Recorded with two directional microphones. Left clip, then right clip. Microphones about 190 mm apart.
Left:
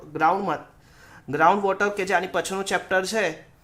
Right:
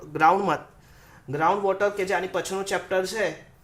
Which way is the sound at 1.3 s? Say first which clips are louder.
Left 3 dB; 25° left (ahead or behind).